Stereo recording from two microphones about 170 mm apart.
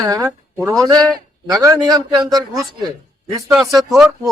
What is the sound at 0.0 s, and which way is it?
Speech, 20° right (ahead or behind).